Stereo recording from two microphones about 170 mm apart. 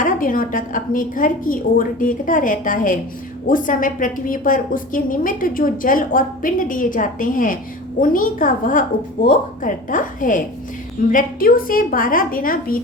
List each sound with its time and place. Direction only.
0.0 s a woman's voice: 55° left (ahead or behind)